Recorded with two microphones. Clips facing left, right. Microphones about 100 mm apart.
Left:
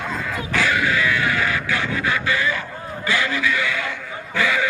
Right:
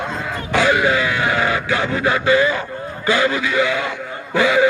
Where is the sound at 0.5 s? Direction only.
20° right (ahead or behind).